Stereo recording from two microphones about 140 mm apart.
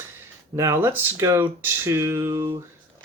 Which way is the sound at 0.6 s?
20° right (ahead or behind).